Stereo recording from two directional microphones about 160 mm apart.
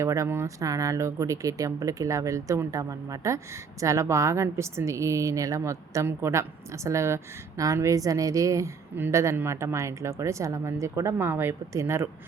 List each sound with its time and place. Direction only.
0.0 s speech: 20° right (ahead or behind)